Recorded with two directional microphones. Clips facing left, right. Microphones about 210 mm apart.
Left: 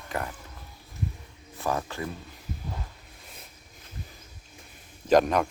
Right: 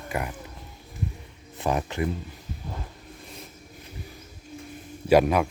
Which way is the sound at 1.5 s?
20° right (ahead or behind).